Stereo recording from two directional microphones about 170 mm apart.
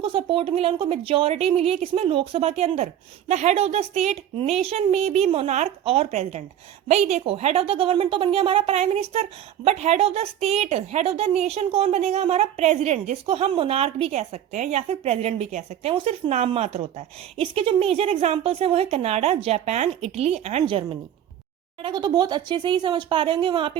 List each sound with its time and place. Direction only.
0.0 s a woman's voice: 30° right (ahead or behind)